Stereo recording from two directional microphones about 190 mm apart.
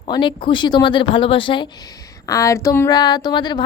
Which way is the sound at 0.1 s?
25° left (ahead or behind).